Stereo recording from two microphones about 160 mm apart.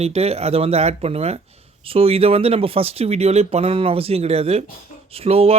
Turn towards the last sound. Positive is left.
turn(degrees=-40)  # may be behind; listen again after turning